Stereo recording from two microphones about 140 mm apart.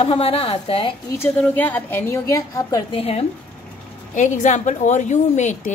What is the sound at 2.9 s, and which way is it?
Speech, 45° left (ahead or behind).